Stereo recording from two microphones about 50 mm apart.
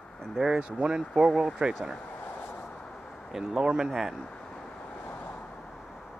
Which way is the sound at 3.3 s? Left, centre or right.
Centre.